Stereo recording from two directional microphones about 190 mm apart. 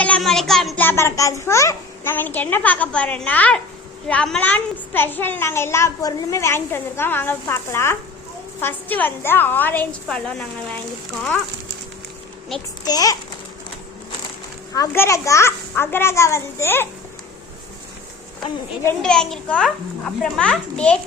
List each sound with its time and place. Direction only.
0.0 s a child's voice: 5° left (ahead or behind)
12.8 s a child's voice: 20° left (ahead or behind)
14.7 s a child's voice: 15° left (ahead or behind)
18.9 s a child's voice: 5° left (ahead or behind)